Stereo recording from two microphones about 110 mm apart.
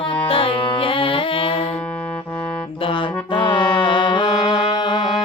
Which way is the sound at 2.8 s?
50° left (ahead or behind).